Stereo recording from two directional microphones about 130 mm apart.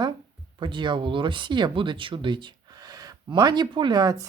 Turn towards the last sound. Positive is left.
turn(degrees=-30)  # may be behind; listen again after turning